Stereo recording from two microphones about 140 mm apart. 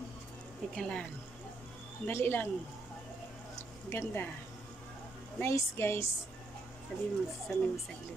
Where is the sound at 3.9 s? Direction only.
15° left (ahead or behind).